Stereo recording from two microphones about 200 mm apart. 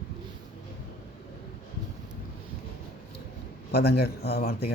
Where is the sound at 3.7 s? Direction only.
55° left (ahead or behind).